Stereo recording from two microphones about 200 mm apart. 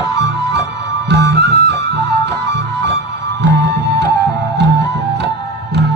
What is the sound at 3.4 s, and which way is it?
Music, 60° right (ahead or behind).